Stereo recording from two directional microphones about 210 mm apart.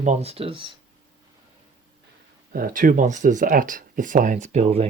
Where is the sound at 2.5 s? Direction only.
40° right (ahead or behind).